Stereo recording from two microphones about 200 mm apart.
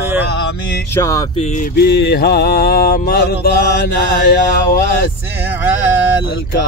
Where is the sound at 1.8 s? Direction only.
55° left (ahead or behind).